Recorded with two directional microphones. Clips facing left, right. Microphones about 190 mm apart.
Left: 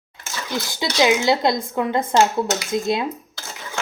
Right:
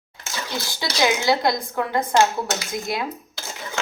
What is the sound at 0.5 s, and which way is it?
Speech, 20° left (ahead or behind).